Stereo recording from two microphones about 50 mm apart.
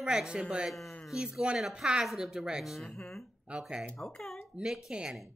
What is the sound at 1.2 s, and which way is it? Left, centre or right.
Speech, centre.